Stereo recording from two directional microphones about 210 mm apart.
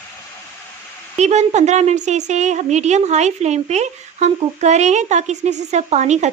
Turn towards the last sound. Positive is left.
turn(degrees=-35)  # may be behind; listen again after turning